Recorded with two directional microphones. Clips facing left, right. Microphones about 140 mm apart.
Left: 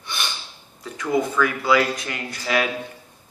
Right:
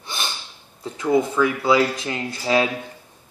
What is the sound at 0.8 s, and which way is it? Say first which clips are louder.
Speech: right 3 dB; 25° right (ahead or behind).